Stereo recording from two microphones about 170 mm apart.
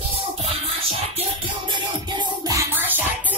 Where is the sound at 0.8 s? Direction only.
30° right (ahead or behind).